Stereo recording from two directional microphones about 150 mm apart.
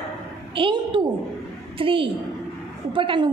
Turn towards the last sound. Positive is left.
turn(degrees=-35)  # may be behind; listen again after turning